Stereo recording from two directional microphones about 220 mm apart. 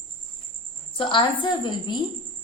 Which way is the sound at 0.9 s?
20° left (ahead or behind).